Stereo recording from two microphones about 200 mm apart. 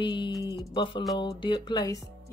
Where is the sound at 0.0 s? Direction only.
25° left (ahead or behind).